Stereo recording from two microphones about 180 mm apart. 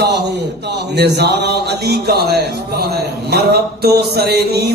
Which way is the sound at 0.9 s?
65° right (ahead or behind).